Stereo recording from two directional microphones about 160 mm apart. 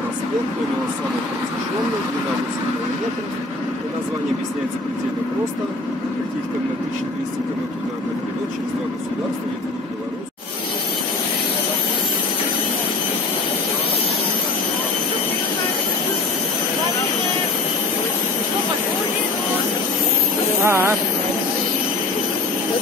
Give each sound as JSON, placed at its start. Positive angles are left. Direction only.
{"t": 20.6, "sound": "vehicle", "side_deg": -15}